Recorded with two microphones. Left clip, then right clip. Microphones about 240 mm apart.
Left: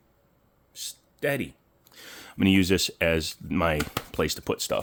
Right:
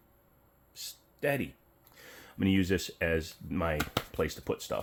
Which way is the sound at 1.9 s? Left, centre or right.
Left.